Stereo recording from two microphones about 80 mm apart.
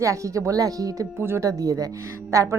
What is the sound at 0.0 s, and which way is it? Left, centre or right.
Speech, right.